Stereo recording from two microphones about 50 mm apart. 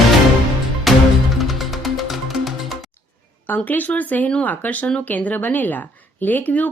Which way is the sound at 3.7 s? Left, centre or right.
Left.